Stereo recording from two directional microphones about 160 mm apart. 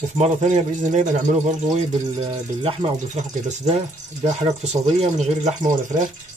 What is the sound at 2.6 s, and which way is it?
A man's voice, 40° right (ahead or behind).